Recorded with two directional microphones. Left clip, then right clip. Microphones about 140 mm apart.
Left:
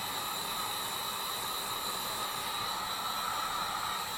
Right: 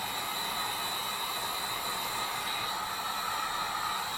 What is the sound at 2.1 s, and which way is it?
Train, 5° left (ahead or behind).